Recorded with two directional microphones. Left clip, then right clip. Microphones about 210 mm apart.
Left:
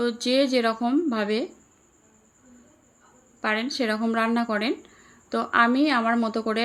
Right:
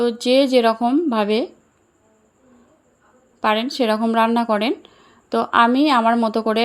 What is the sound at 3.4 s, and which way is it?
Speech, 30° right (ahead or behind).